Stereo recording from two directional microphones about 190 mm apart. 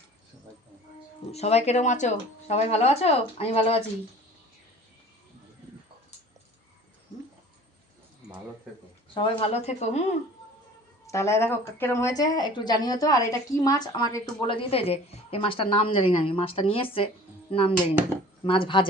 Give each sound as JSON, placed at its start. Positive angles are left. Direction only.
{"t": 1.3, "sound": "speech", "side_deg": 35}
{"t": 9.1, "sound": "speech", "side_deg": 30}
{"t": 11.0, "sound": "speech", "side_deg": 15}